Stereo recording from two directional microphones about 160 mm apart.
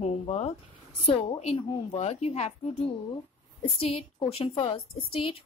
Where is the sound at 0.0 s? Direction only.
45° left (ahead or behind).